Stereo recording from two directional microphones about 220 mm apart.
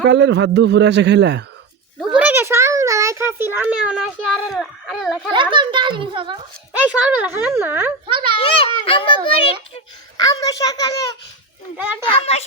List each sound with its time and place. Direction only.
0.1 s a man's voice: 55° right (ahead or behind)
2.1 s a sound: 10° right (ahead or behind)
5.3 s a child's voice: 20° right (ahead or behind)
6.8 s speech: 5° right (ahead or behind)
8.0 s a child's voice: 20° right (ahead or behind)
8.4 s a child's voice: 25° left (ahead or behind)
11.8 s speech: 5° right (ahead or behind)
12.0 s a child's voice: 25° left (ahead or behind)